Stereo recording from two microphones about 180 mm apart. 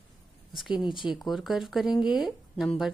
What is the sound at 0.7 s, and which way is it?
Speech, 25° left (ahead or behind).